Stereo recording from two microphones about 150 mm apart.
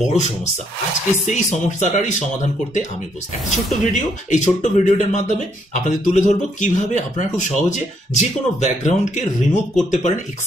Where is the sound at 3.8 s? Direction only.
55° left (ahead or behind).